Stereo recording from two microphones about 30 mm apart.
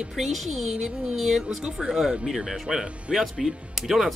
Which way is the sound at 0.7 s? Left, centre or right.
Right.